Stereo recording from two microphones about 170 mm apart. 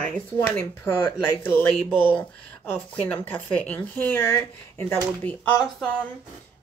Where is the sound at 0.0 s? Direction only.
10° left (ahead or behind).